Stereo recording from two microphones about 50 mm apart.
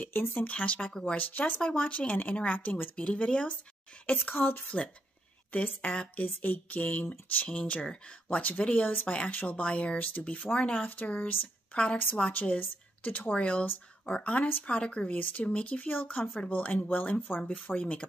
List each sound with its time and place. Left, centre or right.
0.0 s speech: left
3.0 s speech: left
4.2 s a woman's voice: left
5.5 s speech: left
9.0 s speech: left
9.3 s speech: left
12.3 s speech: left
17.6 s speech: left